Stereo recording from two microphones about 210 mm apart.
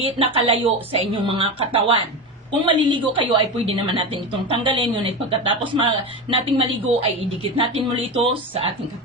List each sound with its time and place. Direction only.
0.0 s a woman's voice: 25° right (ahead or behind)